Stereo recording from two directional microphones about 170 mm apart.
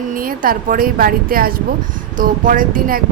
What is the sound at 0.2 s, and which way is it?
A woman's voice, 55° right (ahead or behind).